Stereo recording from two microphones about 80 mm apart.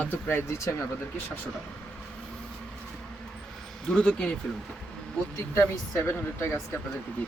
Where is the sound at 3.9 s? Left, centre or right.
Centre.